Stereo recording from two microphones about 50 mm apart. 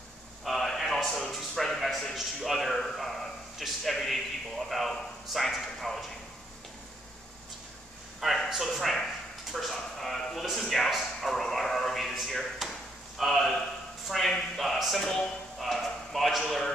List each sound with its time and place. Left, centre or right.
0.5 s a sound: centre
2.1 s a man's voice: centre
8.2 s a man's voice: centre